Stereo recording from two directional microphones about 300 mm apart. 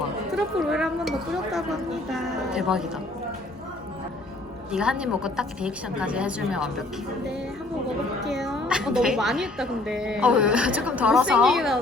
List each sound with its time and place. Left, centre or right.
0.3 s a woman's voice: centre
4.7 s a woman's voice: centre
8.2 s a woman's voice: centre